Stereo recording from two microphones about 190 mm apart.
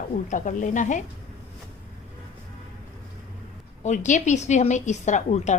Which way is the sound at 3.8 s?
40° left (ahead or behind).